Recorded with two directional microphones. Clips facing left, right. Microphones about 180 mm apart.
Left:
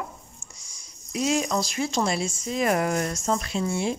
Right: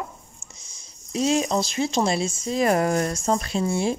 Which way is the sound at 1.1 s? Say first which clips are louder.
Right 3 dB; 30° right (ahead or behind).